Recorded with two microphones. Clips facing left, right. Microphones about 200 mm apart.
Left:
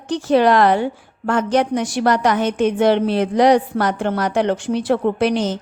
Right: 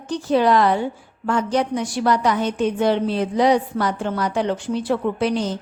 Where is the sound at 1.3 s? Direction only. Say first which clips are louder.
Left 3 dB; 85° left.